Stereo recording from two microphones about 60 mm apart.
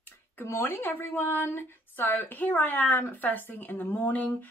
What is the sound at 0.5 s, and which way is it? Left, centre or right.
Speech, left.